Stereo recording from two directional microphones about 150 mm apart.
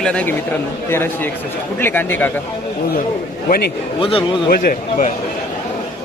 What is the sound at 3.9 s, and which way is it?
Speech, 35° left (ahead or behind).